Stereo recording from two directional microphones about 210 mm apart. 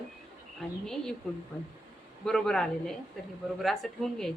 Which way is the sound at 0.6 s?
Centre (ahead or behind).